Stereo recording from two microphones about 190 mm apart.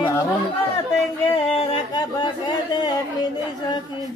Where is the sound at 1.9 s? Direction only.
20° left (ahead or behind).